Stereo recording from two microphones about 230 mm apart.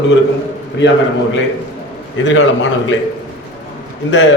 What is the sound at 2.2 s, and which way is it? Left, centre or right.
Speech, left.